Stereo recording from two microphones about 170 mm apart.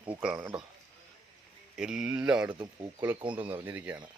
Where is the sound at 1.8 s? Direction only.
5° right (ahead or behind).